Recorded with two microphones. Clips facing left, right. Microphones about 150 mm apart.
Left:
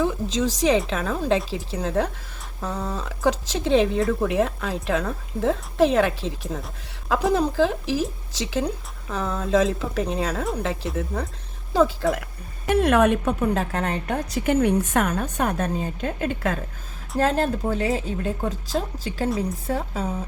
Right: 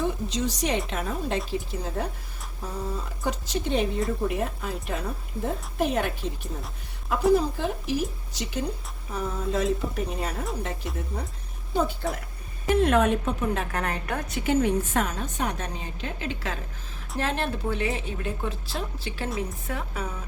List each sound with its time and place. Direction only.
0.0 s a sound: 90° left
0.9 s a woman's voice: 90° left
12.6 s a woman's voice: 65° left (ahead or behind)
13.7 s a woman's voice: 25° left (ahead or behind)
14.4 s a woman's voice: 60° left (ahead or behind); by 20.2 s 35° left (ahead or behind)